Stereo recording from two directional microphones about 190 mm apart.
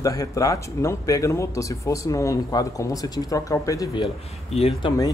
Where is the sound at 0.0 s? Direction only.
15° left (ahead or behind).